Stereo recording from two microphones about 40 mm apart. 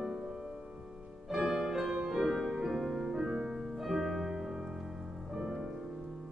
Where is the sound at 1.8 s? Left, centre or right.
Centre.